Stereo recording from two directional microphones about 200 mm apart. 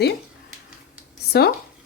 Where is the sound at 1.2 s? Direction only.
50° left (ahead or behind).